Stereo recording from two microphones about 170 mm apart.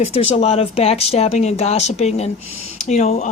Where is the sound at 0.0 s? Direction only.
35° left (ahead or behind).